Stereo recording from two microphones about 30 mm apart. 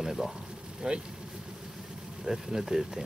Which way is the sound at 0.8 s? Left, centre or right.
Right.